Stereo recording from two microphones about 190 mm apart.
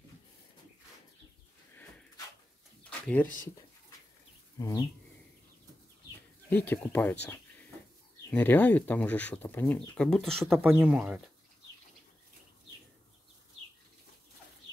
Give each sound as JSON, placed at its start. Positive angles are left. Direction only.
{"t": 2.8, "sound": "a sound", "side_deg": 5}
{"t": 4.6, "sound": "speech", "side_deg": 15}
{"t": 6.5, "sound": "speech", "side_deg": 10}